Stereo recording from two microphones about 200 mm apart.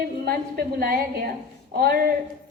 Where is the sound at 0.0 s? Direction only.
50° right (ahead or behind).